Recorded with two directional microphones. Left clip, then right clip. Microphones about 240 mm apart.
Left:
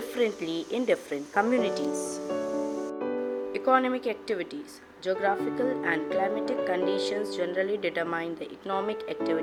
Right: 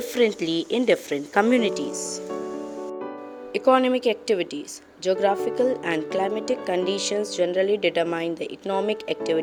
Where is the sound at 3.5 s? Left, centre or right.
Right.